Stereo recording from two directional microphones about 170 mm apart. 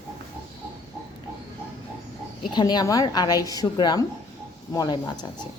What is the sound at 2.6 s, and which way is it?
Speech, 25° left (ahead or behind).